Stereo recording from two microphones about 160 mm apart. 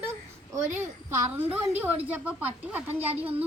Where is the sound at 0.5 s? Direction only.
15° right (ahead or behind).